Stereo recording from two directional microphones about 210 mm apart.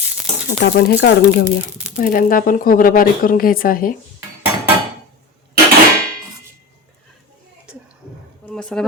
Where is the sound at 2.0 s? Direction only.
40° left (ahead or behind).